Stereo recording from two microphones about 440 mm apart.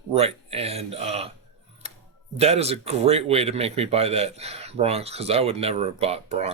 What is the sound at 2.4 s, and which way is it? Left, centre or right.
A man's voice, centre.